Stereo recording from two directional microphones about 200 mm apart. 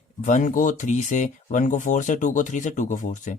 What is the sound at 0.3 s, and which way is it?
Speech, 40° left (ahead or behind).